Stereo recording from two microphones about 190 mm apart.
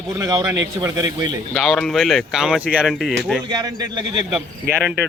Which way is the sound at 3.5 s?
20° right (ahead or behind).